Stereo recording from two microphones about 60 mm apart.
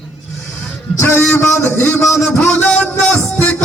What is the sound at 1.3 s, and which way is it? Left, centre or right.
Mantra, left.